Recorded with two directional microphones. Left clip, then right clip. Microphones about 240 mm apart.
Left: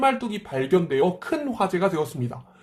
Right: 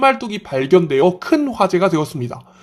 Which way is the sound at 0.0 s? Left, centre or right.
Right.